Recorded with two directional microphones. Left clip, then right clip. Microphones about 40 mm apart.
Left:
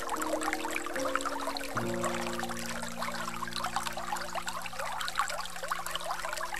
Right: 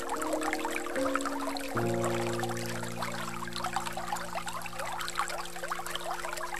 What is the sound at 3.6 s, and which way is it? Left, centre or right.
Water, left.